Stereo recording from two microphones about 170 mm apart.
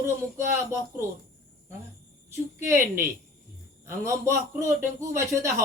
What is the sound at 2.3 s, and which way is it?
A man's voice, 15° right (ahead or behind).